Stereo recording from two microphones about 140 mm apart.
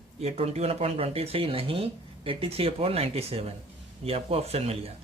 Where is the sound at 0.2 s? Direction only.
50° right (ahead or behind).